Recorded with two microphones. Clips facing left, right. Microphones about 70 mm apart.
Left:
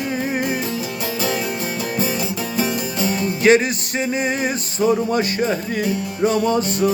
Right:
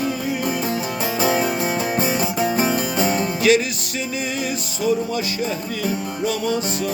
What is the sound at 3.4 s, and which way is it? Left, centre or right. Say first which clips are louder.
Music: left 4 dB; left.